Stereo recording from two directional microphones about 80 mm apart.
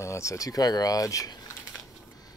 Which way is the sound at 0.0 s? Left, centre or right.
Left.